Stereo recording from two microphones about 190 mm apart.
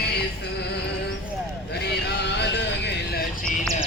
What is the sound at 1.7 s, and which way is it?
Vehicle, 60° left (ahead or behind).